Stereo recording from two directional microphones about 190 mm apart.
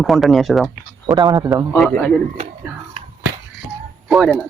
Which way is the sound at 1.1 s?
20° right (ahead or behind).